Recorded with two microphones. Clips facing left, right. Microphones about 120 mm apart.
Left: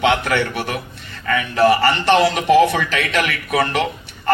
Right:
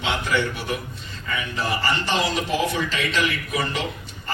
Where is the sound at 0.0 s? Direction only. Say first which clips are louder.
Left 6 dB; 65° left (ahead or behind).